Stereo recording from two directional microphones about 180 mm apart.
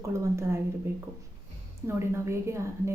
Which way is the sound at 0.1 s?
15° right (ahead or behind).